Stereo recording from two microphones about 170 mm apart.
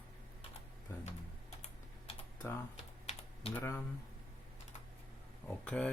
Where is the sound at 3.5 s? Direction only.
15° left (ahead or behind).